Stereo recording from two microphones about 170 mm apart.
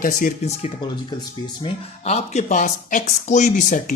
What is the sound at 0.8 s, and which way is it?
Speech, 25° left (ahead or behind).